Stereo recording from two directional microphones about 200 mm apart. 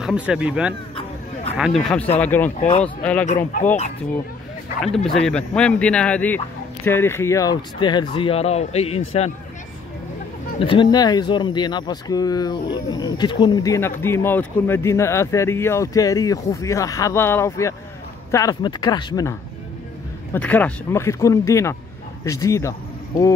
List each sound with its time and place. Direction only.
0.0 s speech: 5° right (ahead or behind)
1.8 s speech: 5° left (ahead or behind)
4.8 s speech: centre (ahead or behind); by 9.3 s 30° left (ahead or behind)
10.6 s speech: 25° left (ahead or behind)
20.3 s speech: 5° left (ahead or behind)